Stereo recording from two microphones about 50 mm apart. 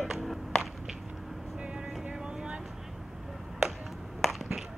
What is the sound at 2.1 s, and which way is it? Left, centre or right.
Vehicle, centre.